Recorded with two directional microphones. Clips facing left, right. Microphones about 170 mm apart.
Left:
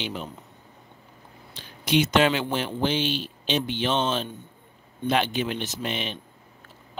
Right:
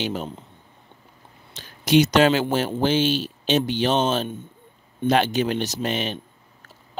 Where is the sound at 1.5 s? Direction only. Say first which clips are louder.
Right 6 dB; 40° right (ahead or behind).